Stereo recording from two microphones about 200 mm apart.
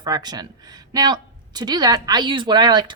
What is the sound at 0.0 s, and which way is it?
Speech, 20° right (ahead or behind).